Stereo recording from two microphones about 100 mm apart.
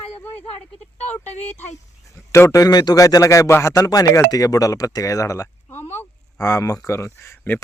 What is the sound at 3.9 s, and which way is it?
Speech, 40° left (ahead or behind).